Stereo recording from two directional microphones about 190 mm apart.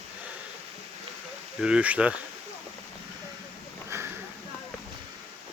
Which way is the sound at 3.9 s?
15° right (ahead or behind).